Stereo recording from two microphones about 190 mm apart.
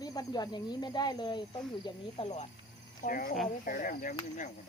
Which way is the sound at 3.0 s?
45° left (ahead or behind).